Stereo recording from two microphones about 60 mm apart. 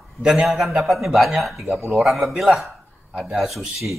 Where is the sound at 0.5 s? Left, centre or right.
Centre.